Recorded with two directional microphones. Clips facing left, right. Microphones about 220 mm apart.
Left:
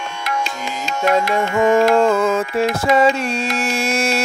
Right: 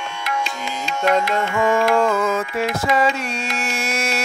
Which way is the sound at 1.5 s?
40° left (ahead or behind).